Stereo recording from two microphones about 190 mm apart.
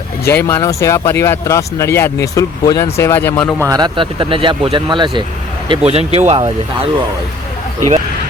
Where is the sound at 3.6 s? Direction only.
20° right (ahead or behind).